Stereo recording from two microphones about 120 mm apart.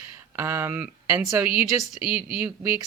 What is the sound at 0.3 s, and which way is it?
Speech, 20° right (ahead or behind).